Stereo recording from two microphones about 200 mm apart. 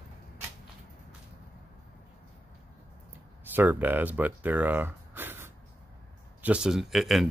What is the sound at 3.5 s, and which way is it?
Speech, 10° right (ahead or behind).